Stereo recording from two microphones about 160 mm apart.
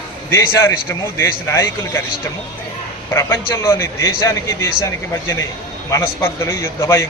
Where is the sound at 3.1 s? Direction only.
15° left (ahead or behind).